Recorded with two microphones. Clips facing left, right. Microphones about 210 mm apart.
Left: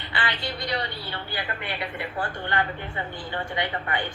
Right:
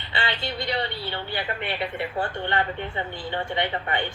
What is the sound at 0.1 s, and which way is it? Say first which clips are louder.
A woman's voice: right 2 dB; 25° right (ahead or behind).